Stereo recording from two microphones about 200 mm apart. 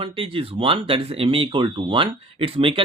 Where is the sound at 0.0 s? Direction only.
25° right (ahead or behind).